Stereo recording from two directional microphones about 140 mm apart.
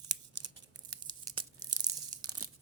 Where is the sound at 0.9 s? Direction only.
30° right (ahead or behind).